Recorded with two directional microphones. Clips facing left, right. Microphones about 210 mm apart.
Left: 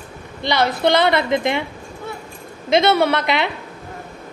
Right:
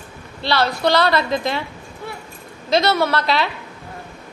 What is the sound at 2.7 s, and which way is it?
Speech, 20° left (ahead or behind).